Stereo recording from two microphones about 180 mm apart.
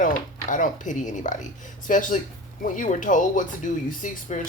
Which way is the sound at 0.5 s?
45° left (ahead or behind).